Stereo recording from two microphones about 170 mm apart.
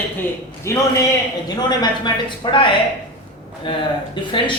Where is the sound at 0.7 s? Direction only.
15° left (ahead or behind).